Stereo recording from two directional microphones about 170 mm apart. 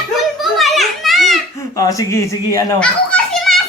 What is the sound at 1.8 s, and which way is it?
Speech, 20° left (ahead or behind).